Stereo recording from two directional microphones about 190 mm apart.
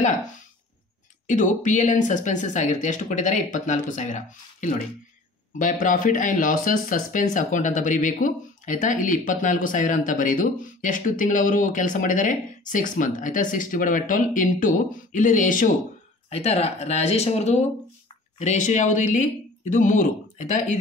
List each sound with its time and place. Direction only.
1.2 s speech: 40° left (ahead or behind)
16.3 s speech: 35° left (ahead or behind)